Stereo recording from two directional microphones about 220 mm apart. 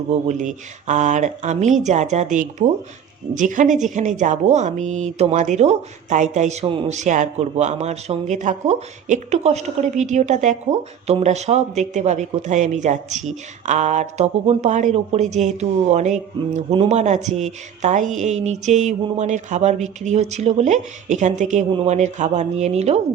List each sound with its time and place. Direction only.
0.1 s speech: 35° right (ahead or behind)